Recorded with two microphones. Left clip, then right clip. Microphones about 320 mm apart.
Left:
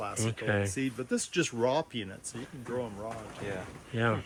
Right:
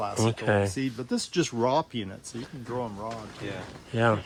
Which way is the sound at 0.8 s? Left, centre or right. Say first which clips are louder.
Right 2 dB; right.